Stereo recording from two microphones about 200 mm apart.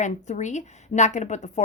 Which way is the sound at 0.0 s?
35° left (ahead or behind).